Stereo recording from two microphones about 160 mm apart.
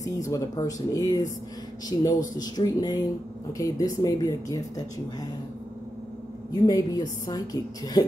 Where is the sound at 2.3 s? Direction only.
25° left (ahead or behind).